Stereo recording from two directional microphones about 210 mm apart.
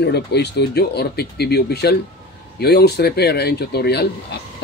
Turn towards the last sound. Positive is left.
turn(degrees=50)  # may be behind; listen again after turning